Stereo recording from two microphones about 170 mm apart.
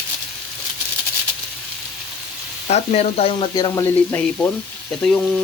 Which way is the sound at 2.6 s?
40° left (ahead or behind).